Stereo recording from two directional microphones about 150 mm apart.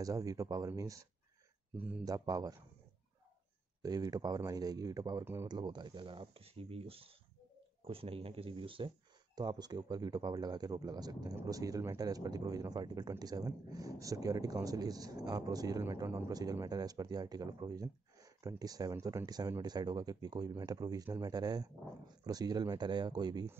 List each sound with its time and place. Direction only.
0.0 s speech: 25° right (ahead or behind)
1.8 s speech: 10° right (ahead or behind)
2.0 s speech: 25° right (ahead or behind)
3.8 s speech: 25° right (ahead or behind)
5.5 s speech: 30° right (ahead or behind)